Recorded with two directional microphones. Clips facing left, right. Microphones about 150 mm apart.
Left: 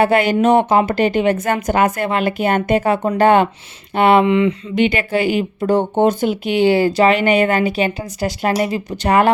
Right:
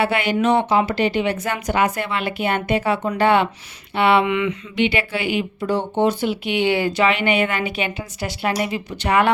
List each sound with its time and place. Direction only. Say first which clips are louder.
0.0 s speech: left 5 dB; 45° left (ahead or behind)
4.7 s speech: left 4 dB; 45° left (ahead or behind)